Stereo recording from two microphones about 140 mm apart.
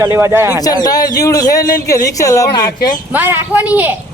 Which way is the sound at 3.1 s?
15° right (ahead or behind).